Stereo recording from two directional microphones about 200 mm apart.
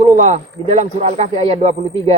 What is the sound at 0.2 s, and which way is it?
Speech, 35° right (ahead or behind).